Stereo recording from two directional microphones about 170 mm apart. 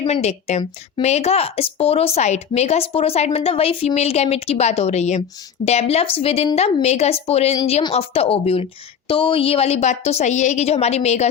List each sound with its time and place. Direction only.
0.1 s a woman's voice: 40° left (ahead or behind)